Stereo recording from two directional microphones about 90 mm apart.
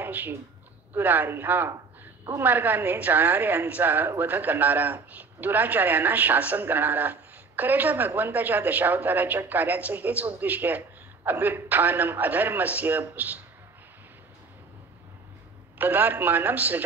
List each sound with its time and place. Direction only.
0.0 s a man's voice: 20° right (ahead or behind)
15.8 s a man's voice: 20° right (ahead or behind)